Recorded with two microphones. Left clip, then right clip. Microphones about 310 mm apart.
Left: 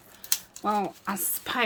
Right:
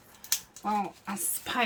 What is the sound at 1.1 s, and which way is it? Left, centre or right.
Speech, centre.